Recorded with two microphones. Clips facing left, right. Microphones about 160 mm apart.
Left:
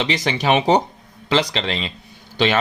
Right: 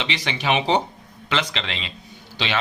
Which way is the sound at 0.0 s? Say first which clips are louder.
Left 6 dB; 40° left (ahead or behind).